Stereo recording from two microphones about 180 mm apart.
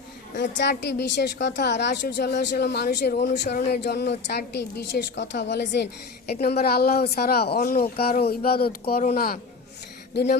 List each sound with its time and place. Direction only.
0.3 s a woman's voice: 65° left (ahead or behind)